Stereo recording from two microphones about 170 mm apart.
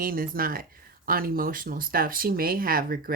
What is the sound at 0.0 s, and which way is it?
Speech, 55° right (ahead or behind).